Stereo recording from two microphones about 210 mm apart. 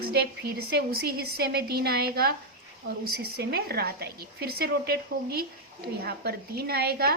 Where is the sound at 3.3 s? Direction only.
50° right (ahead or behind).